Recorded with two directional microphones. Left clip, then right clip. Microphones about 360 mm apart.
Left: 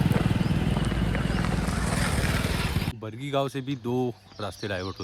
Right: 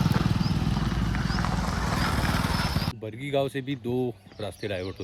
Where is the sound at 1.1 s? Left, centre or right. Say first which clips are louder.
Even; centre.